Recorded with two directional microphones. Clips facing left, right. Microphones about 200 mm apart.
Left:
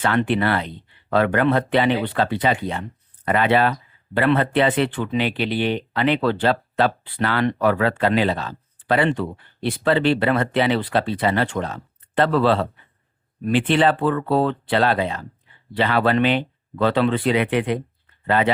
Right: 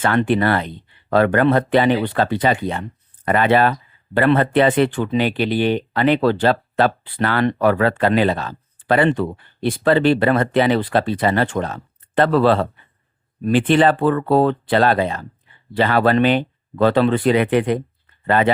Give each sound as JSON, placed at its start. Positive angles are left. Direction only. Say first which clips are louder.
{"t": 0.0, "sound": "speech", "louder": "right 3 dB", "side_deg": -45}